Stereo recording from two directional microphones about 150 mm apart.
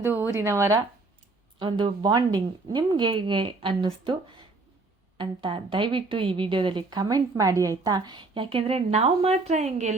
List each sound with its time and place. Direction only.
0.0 s speech: 15° right (ahead or behind)
1.5 s a woman's voice: 30° right (ahead or behind); by 9.9 s 50° right (ahead or behind)